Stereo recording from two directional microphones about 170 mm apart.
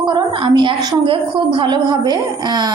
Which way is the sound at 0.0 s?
25° right (ahead or behind).